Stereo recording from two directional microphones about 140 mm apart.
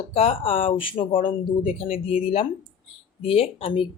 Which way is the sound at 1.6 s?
70° left (ahead or behind).